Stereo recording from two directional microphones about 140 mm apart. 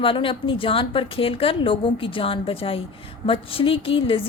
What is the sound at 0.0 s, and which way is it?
A woman's voice, 40° left (ahead or behind).